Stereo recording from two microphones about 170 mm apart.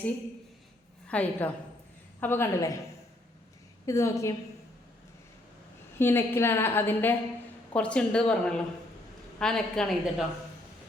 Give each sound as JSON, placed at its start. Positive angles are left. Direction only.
{"t": 1.0, "sound": "a woman's voice", "side_deg": 10}
{"t": 3.8, "sound": "a woman's voice", "side_deg": 15}
{"t": 6.0, "sound": "a woman's voice", "side_deg": 15}